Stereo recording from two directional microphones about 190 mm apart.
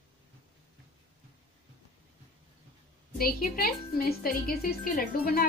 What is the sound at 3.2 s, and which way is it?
A woman's voice, 55° left (ahead or behind).